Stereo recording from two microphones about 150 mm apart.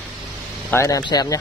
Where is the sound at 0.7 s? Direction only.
20° left (ahead or behind).